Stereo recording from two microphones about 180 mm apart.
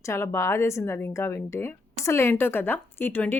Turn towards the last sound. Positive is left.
turn(degrees=10)  # may be behind; listen again after turning